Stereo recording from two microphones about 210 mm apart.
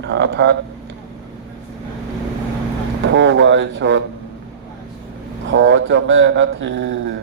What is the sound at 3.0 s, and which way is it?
A man's voice, 60° right (ahead or behind).